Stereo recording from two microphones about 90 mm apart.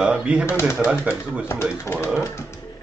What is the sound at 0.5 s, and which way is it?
Speech, 25° left (ahead or behind).